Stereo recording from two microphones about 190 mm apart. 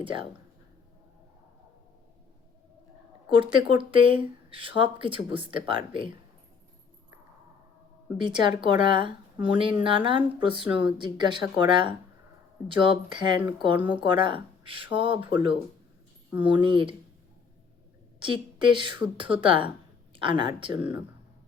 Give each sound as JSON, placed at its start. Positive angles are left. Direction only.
{"t": 0.0, "sound": "a woman's voice", "side_deg": -25}
{"t": 3.3, "sound": "a woman's voice", "side_deg": -25}
{"t": 8.2, "sound": "a woman's voice", "side_deg": -25}
{"t": 18.2, "sound": "a woman's voice", "side_deg": -25}